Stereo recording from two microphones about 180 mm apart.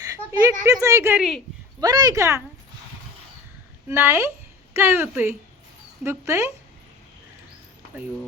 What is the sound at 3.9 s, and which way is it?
Speech, 15° right (ahead or behind).